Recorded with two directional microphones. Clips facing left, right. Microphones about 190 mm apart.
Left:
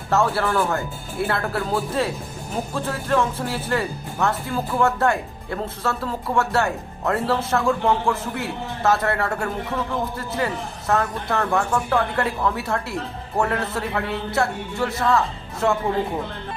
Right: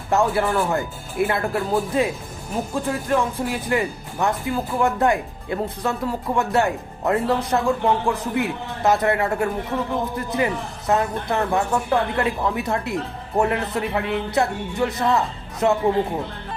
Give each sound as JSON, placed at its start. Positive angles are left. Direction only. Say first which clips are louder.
{"t": 0.1, "sound": "a man's voice", "louder": "right 1 dB", "side_deg": -15}